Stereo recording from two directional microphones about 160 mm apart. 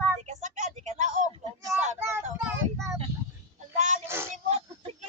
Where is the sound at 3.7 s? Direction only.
50° right (ahead or behind).